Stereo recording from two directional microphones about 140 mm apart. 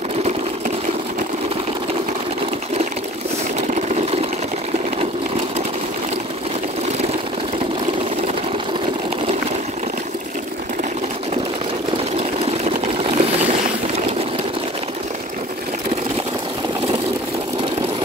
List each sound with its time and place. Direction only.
13.0 s boat: 45° right (ahead or behind)